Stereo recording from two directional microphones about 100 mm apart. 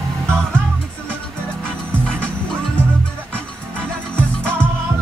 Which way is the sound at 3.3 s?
15° left (ahead or behind).